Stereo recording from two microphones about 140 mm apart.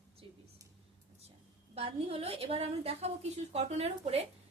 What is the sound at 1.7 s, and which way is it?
A woman's voice, 45° right (ahead or behind).